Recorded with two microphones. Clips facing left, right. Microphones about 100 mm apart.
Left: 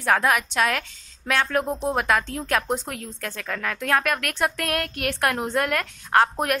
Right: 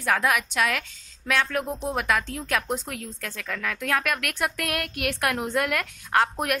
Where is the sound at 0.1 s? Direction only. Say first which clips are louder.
Left 3 dB; 35° left (ahead or behind).